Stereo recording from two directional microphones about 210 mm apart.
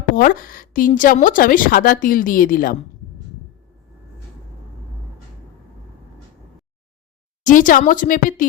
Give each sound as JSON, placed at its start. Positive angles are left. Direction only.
{"t": 0.2, "sound": "a woman's voice", "side_deg": 40}
{"t": 7.4, "sound": "a woman's voice", "side_deg": 40}